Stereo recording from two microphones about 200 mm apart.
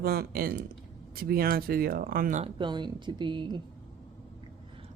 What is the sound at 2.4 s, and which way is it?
Speech, 25° right (ahead or behind).